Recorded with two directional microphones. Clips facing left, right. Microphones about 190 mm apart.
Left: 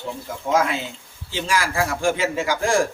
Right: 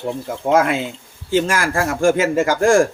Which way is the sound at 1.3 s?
50° right (ahead or behind).